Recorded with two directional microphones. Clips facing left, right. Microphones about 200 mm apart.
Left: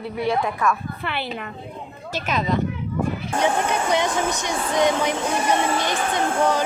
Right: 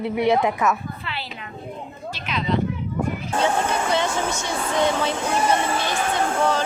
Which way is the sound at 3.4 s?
15° left (ahead or behind).